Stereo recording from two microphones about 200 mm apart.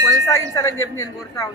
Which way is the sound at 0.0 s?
15° left (ahead or behind).